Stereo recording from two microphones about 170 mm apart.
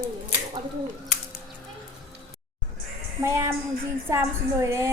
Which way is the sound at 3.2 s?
15° right (ahead or behind).